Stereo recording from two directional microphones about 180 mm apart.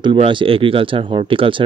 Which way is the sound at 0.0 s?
25° right (ahead or behind).